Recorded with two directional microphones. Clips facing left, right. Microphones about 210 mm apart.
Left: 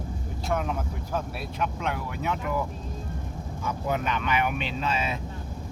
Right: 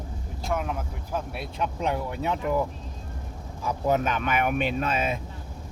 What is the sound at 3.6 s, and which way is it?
Speech, 40° right (ahead or behind).